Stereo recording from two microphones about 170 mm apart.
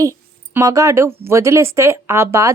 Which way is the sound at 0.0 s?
20° right (ahead or behind).